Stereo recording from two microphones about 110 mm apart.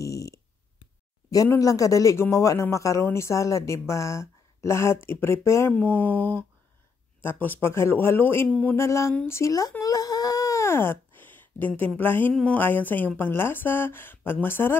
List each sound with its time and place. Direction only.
0.0 s a sound: 30° left (ahead or behind)
1.6 s speech: 30° left (ahead or behind)
8.5 s speech: 10° left (ahead or behind)
8.7 s speech: 25° left (ahead or behind)
9.1 s a sound: 20° left (ahead or behind)
12.0 s speech: 20° left (ahead or behind)